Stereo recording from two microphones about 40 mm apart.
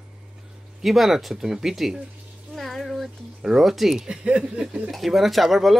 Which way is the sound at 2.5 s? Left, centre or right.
Centre.